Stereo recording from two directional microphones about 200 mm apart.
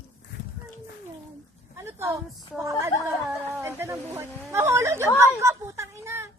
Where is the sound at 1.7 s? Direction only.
10° right (ahead or behind).